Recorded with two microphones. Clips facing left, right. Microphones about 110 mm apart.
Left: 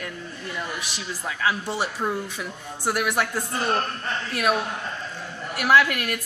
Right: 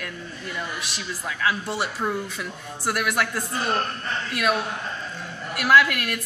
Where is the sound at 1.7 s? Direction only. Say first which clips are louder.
Even; 10° left (ahead or behind).